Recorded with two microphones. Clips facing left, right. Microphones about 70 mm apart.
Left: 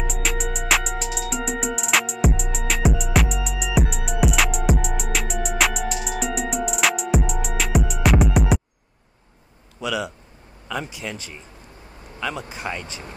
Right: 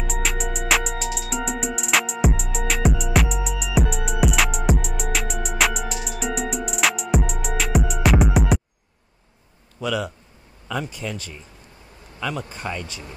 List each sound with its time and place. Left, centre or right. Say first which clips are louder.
0.0 s music: even; centre
9.8 s a sound: right 1 dB; centre
10.7 s speech: right 1 dB; centre
12.2 s speech: even; centre
12.5 s speech: even; centre